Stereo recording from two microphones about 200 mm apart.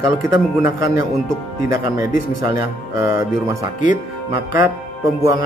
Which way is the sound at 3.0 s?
15° right (ahead or behind).